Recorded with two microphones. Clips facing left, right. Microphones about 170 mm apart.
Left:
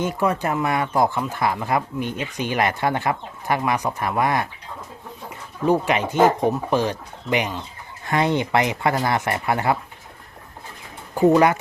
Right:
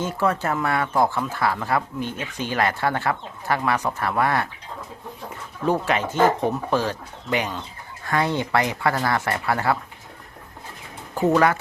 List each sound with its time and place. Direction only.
0.0 s speech: 15° left (ahead or behind)
5.6 s speech: 15° left (ahead or behind)
11.1 s speech: 15° left (ahead or behind)